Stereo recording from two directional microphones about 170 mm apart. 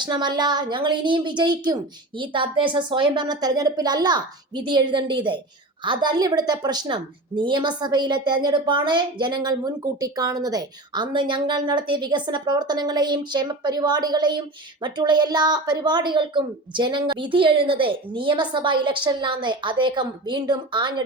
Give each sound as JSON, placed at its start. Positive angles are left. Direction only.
{"t": 0.0, "sound": "a woman's voice", "side_deg": -25}